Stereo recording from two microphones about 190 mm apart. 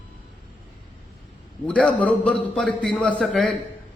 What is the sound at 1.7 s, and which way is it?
A man's voice, 5° left (ahead or behind).